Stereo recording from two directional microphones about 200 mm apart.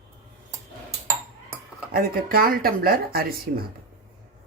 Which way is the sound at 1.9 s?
45° right (ahead or behind).